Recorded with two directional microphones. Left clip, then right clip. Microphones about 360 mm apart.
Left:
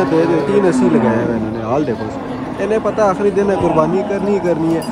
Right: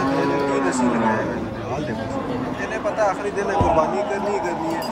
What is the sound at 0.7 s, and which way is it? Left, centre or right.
Speech, right.